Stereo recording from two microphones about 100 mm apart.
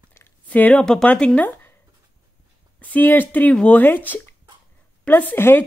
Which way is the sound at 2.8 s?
20° left (ahead or behind).